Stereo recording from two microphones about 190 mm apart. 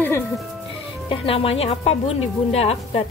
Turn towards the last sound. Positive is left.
turn(degrees=30)  # may be behind; listen again after turning